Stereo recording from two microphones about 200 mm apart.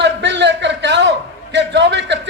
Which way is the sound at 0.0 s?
60° right (ahead or behind).